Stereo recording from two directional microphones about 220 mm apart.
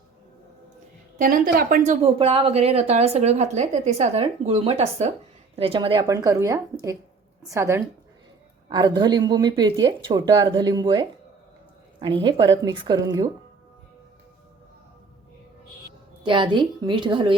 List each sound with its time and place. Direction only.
1.2 s a woman's voice: 40° right (ahead or behind); by 13.2 s 20° right (ahead or behind)
16.2 s a woman's voice: 20° right (ahead or behind)